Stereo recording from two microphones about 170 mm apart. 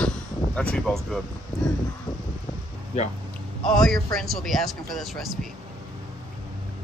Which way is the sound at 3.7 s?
5° left (ahead or behind).